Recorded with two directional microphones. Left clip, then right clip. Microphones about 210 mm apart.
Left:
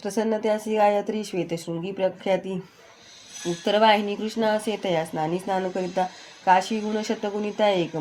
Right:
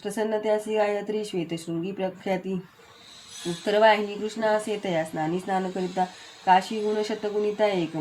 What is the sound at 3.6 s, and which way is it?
Speech, 40° left (ahead or behind).